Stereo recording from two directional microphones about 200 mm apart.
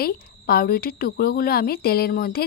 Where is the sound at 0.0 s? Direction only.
50° left (ahead or behind).